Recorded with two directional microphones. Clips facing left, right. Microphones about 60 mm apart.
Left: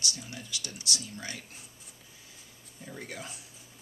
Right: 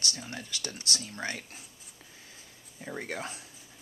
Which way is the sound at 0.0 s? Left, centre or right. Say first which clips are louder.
Right 2 dB; right.